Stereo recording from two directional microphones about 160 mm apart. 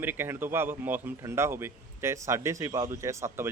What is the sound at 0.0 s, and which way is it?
Speech, 15° right (ahead or behind).